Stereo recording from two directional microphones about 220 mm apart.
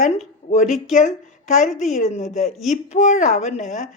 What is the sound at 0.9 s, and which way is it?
A woman's voice, 35° left (ahead or behind).